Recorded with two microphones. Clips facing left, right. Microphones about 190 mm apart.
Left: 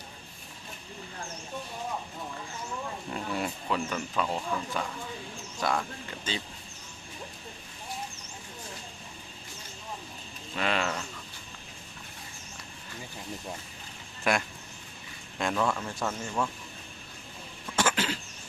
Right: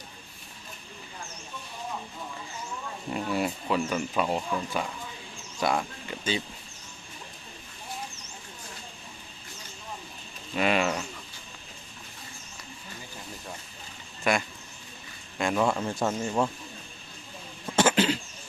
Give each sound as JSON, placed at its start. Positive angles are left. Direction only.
{"t": 3.1, "sound": "speech", "side_deg": -5}
{"t": 10.5, "sound": "speech", "side_deg": -15}
{"t": 14.3, "sound": "speech", "side_deg": 0}
{"t": 15.7, "sound": "speech", "side_deg": -25}
{"t": 17.7, "sound": "a sound", "side_deg": -20}